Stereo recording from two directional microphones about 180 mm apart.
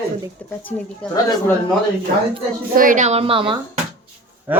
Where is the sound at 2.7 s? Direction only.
50° right (ahead or behind); by 3.6 s 30° right (ahead or behind).